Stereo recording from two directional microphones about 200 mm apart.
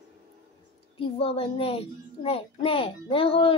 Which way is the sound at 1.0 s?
30° left (ahead or behind).